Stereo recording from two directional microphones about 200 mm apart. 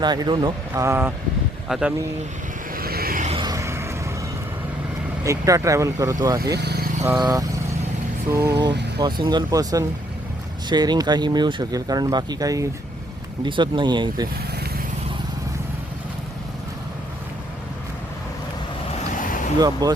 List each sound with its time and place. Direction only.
0.0 s speech: 20° right (ahead or behind)
1.6 s speech: centre (ahead or behind)
2.7 s vehicle: 50° right (ahead or behind)
3.2 s a sound: 25° right (ahead or behind)
5.2 s speech: 15° right (ahead or behind)
6.6 s vehicle: 55° right (ahead or behind)
7.0 s speech: 15° right (ahead or behind)
8.5 s speech: 60° right (ahead or behind)
9.0 s speech: 20° right (ahead or behind)
18.9 s boat: 40° left (ahead or behind)
19.5 s speech: 20° right (ahead or behind)